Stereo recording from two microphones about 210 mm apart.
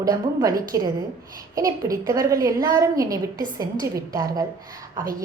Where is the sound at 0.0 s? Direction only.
20° right (ahead or behind).